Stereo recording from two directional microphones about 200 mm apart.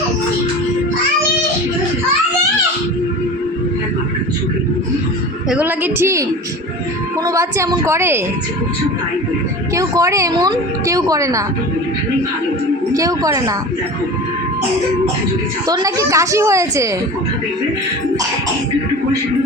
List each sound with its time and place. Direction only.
5.5 s a sound: 10° right (ahead or behind)
7.3 s speech: 15° right (ahead or behind)
9.7 s speech: 15° right (ahead or behind)
12.9 s speech: 15° right (ahead or behind)
15.6 s speech: 20° right (ahead or behind)